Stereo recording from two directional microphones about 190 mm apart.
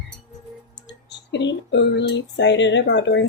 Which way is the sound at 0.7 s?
65° left (ahead or behind).